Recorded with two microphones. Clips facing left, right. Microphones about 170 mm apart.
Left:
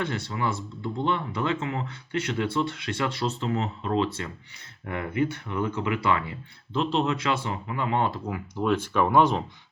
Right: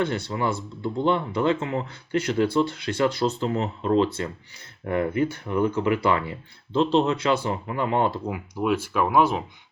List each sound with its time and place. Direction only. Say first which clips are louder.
0.0 s speech: right 4 dB; 30° right (ahead or behind)
8.3 s speech: right 1 dB; 10° right (ahead or behind)